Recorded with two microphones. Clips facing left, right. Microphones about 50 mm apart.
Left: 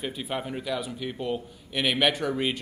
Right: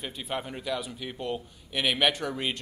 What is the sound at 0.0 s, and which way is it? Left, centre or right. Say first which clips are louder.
A man's voice: left 2 dB; centre.